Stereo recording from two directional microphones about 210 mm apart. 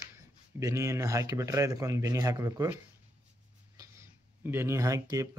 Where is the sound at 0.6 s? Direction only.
15° right (ahead or behind).